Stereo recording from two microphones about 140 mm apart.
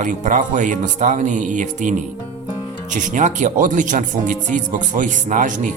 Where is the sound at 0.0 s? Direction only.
65° right (ahead or behind).